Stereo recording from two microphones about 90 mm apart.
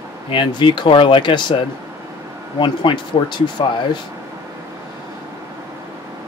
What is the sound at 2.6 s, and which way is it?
Speech, 60° left (ahead or behind).